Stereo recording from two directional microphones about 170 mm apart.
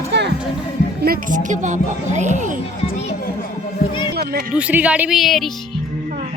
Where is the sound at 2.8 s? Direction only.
40° left (ahead or behind).